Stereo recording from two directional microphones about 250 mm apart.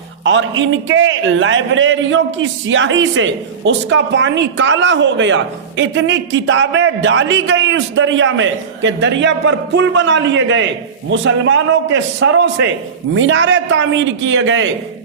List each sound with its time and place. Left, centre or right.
0.3 s a man's voice: right